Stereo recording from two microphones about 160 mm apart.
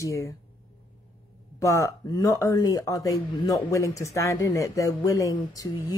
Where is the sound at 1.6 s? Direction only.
20° left (ahead or behind).